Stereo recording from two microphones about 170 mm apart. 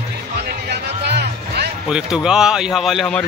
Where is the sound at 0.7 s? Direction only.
80° right.